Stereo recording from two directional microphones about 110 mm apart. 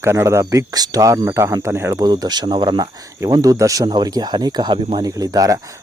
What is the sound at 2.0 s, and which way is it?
Speech, 40° right (ahead or behind).